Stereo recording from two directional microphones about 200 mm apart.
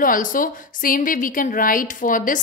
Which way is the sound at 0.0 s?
45° left (ahead or behind).